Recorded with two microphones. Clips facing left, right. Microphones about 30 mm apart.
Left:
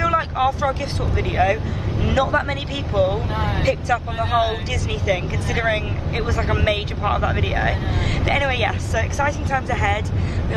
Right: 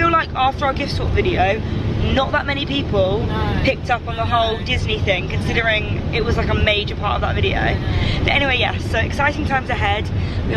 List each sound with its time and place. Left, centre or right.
0.0 s speech: right
8.9 s speech: right